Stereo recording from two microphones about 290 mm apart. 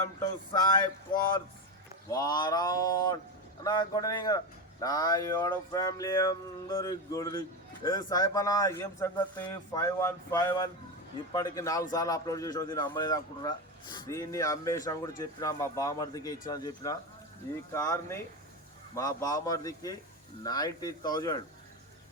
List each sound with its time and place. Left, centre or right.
0.2 s speech: centre
2.0 s speech: centre